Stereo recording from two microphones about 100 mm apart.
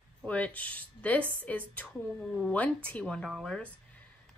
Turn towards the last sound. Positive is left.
turn(degrees=5)  # may be behind; listen again after turning